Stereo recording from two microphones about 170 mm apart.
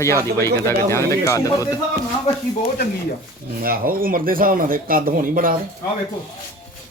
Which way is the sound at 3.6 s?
60° right (ahead or behind).